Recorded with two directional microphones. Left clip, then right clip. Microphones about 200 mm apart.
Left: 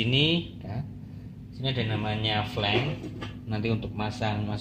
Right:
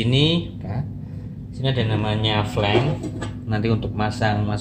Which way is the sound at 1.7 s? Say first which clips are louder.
Right 6 dB; 10° left (ahead or behind).